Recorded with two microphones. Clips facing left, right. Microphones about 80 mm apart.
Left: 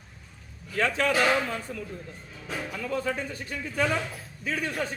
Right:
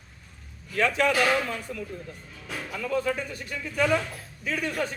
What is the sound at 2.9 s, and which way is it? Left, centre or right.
Speech, left.